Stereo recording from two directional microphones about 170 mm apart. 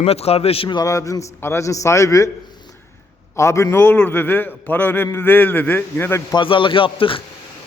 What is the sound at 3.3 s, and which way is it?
A man's voice, 15° left (ahead or behind).